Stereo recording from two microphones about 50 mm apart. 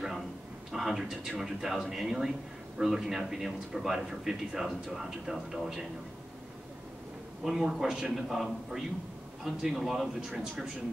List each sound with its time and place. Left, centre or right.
0.7 s speech: centre
7.4 s a man's voice: centre